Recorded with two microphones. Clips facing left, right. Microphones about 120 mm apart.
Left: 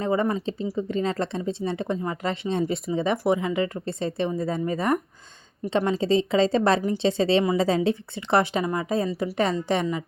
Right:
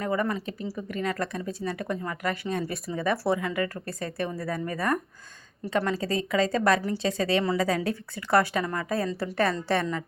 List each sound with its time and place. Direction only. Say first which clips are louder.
0.0 s a woman's voice: left 4 dB; 25° left (ahead or behind)